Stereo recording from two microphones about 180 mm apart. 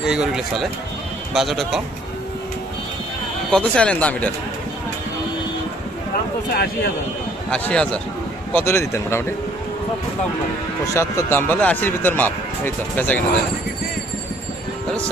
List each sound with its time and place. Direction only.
0.0 s speech: 5° right (ahead or behind)
3.5 s speech: 5° left (ahead or behind)
6.5 s a man's voice: 60° left (ahead or behind)
7.5 s speech: 5° left (ahead or behind)
10.9 s speech: 15° left (ahead or behind)